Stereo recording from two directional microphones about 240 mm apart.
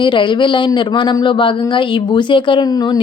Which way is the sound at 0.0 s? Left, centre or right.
Centre.